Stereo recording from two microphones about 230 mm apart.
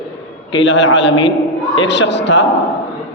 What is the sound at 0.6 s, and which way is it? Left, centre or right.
A man's voice, left.